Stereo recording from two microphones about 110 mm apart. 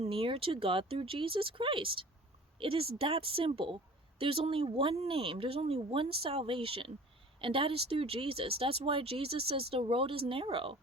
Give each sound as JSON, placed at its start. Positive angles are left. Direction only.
{"t": 0.0, "sound": "speech", "side_deg": -55}